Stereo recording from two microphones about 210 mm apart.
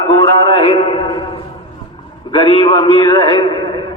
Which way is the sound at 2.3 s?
20° left (ahead or behind).